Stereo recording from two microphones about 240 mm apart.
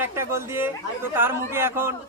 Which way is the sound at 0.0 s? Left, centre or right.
Centre.